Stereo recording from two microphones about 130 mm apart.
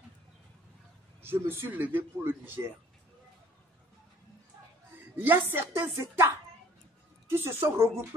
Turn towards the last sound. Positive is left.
turn(degrees=-20)  # may be behind; listen again after turning